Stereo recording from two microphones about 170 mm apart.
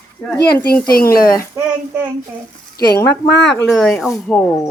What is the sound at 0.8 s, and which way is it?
Speech, 60° left (ahead or behind).